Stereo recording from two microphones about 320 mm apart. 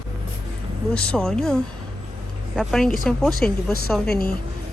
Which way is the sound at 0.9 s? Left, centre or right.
Centre.